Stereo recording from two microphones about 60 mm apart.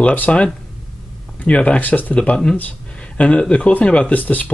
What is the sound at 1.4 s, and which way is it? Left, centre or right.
Speech, left.